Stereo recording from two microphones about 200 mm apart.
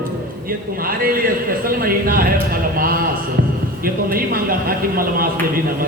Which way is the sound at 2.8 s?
45° right (ahead or behind).